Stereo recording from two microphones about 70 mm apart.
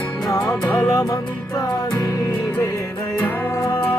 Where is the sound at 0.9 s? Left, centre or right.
Left.